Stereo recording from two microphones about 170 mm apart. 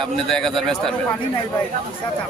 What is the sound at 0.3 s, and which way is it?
Speech, centre (ahead or behind).